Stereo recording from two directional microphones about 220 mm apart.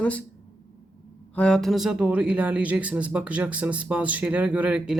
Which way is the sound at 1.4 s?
5° left (ahead or behind).